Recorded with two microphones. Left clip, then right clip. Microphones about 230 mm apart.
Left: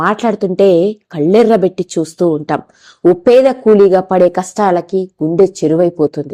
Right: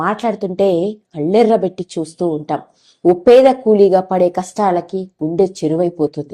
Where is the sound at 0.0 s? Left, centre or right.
Left.